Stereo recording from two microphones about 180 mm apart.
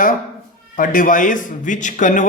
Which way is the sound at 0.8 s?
50° left (ahead or behind).